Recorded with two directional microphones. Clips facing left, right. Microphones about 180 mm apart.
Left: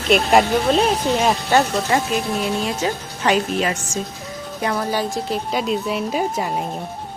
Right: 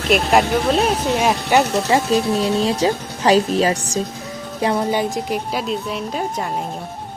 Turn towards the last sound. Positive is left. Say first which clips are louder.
# left 2 dB
turn(degrees=5)  # may be behind; listen again after turning